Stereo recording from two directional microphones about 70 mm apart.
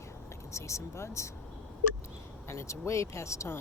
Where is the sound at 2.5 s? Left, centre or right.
Left.